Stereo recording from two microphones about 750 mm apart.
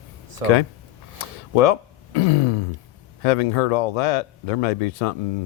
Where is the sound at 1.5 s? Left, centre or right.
Left.